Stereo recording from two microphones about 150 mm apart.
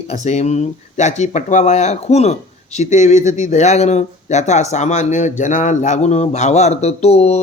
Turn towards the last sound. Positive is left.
turn(degrees=45)  # may be behind; listen again after turning